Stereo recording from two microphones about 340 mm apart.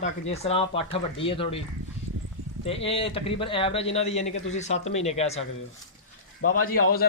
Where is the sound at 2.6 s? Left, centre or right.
Centre.